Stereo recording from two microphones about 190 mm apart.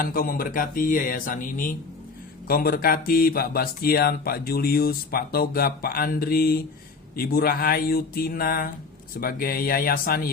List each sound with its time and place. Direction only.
0.0 s speech: 50° left (ahead or behind)